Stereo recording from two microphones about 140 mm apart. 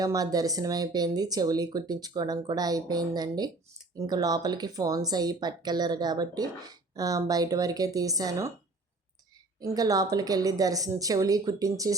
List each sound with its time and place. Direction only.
0.0 s speech: 25° right (ahead or behind)
9.6 s speech: 25° right (ahead or behind)